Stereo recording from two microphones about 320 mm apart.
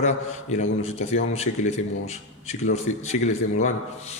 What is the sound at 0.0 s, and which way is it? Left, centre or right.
A man's voice, left.